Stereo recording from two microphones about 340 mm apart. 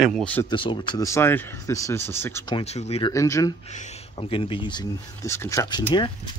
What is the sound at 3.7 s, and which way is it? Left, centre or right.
Speech, centre.